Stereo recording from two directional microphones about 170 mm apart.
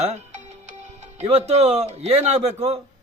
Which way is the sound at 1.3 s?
40° right (ahead or behind).